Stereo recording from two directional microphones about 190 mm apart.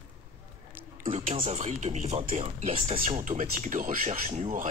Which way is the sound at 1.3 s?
30° right (ahead or behind).